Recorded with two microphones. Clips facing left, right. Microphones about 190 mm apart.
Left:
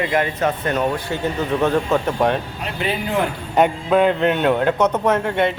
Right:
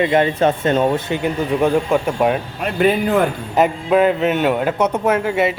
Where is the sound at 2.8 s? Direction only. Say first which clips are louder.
Right 9 dB; 50° right (ahead or behind).